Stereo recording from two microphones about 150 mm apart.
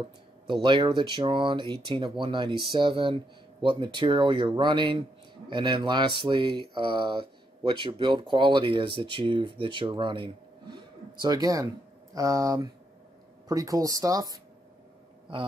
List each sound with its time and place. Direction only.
0.5 s speech: 30° right (ahead or behind)